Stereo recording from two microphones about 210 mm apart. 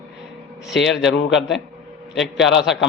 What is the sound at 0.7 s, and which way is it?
Speech, 60° left (ahead or behind).